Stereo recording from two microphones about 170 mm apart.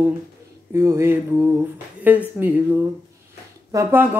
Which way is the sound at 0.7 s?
15° right (ahead or behind).